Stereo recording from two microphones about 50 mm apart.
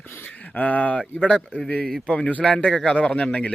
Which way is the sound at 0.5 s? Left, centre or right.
Left.